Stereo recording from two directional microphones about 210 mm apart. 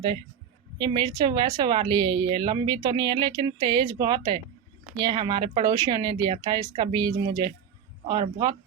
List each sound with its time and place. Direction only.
0.8 s speech: 20° right (ahead or behind)